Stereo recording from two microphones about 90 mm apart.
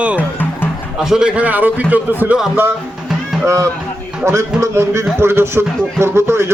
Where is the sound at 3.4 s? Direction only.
35° right (ahead or behind).